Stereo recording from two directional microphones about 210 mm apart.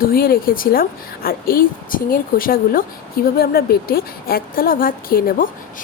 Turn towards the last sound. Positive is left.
turn(degrees=45)  # may be behind; listen again after turning